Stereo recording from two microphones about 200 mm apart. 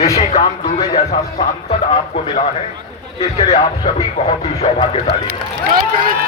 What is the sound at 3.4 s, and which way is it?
Speech, 20° left (ahead or behind).